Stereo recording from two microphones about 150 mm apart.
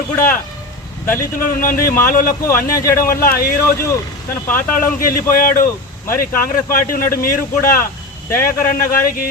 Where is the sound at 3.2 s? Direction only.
80° left.